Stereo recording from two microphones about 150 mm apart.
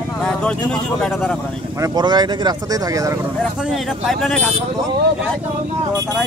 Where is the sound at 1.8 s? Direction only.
30° right (ahead or behind).